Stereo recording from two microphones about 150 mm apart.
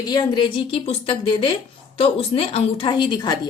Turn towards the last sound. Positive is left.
turn(degrees=25)  # may be behind; listen again after turning